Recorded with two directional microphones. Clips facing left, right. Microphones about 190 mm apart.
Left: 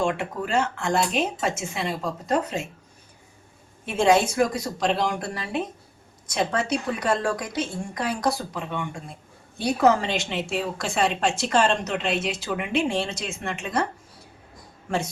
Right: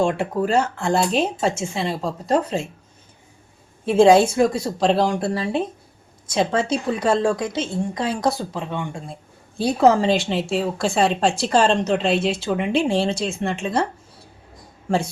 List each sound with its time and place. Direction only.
0.0 s a woman's voice: 35° right (ahead or behind)
3.8 s a woman's voice: 30° right (ahead or behind)
14.8 s speech: 30° right (ahead or behind)